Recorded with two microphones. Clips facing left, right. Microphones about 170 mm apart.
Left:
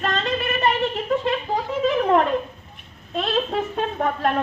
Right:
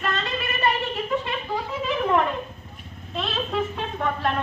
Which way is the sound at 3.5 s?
45° left (ahead or behind).